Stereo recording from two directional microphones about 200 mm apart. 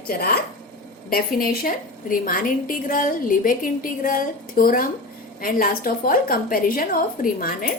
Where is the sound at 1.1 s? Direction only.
45° left (ahead or behind).